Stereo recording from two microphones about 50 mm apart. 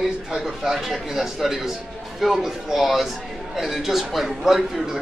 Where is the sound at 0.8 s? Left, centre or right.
Centre.